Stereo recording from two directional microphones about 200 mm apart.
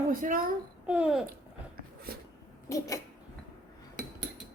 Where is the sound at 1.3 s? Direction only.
50° right (ahead or behind).